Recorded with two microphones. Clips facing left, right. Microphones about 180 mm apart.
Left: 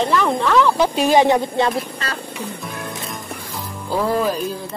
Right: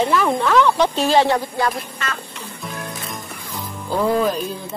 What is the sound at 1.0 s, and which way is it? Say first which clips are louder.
A woman's voice: left 2 dB; 15° left (ahead or behind).